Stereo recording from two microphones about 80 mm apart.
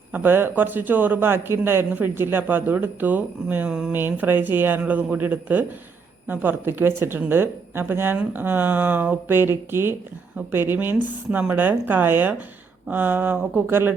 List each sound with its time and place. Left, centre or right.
0.1 s speech: right
3.7 s speech: centre
3.9 s speech: right